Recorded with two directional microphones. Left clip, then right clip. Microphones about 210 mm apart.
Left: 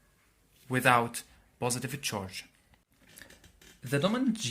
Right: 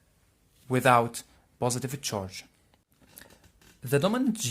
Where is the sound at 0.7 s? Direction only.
45° right (ahead or behind).